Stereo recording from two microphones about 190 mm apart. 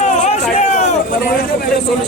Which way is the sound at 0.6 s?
35° left (ahead or behind).